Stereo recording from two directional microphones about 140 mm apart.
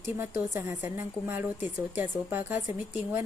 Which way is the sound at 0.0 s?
20° right (ahead or behind).